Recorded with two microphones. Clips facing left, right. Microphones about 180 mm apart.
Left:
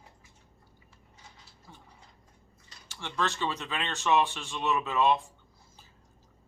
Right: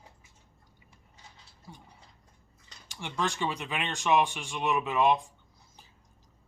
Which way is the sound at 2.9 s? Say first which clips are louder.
Even; 15° right (ahead or behind).